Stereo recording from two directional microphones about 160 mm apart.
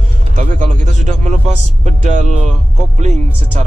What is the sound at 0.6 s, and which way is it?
Speech, 50° right (ahead or behind).